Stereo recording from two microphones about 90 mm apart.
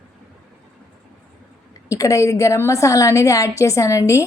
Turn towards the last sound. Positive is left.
turn(degrees=35)  # may be behind; listen again after turning